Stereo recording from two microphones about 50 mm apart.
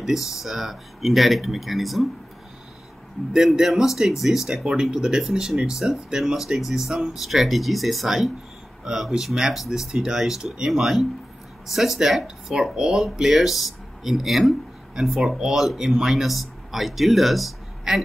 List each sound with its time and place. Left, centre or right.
0.0 s speech: centre
3.3 s speech: centre
4.9 s speech: centre
9.8 s speech: centre
13.3 s speech: centre